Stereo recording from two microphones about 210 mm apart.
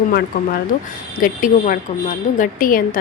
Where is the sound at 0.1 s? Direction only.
45° left (ahead or behind).